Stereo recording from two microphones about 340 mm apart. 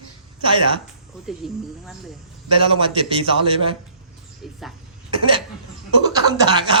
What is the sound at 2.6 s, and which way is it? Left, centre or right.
A man's voice, centre.